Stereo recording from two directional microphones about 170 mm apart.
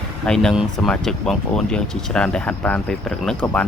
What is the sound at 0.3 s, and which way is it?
Speech, 5° left (ahead or behind).